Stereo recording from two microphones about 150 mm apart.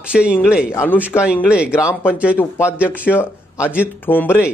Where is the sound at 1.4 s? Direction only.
10° right (ahead or behind).